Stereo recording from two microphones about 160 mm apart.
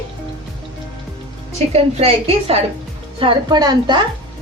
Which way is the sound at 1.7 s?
40° right (ahead or behind).